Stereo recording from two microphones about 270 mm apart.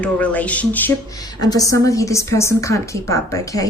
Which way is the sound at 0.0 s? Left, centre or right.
Centre.